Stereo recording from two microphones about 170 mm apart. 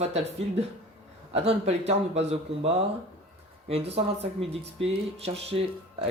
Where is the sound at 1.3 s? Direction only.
40° right (ahead or behind).